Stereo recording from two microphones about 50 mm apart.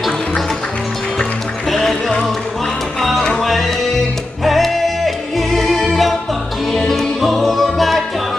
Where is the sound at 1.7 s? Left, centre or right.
Centre.